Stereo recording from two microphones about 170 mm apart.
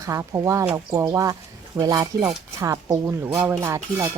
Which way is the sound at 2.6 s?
20° right (ahead or behind).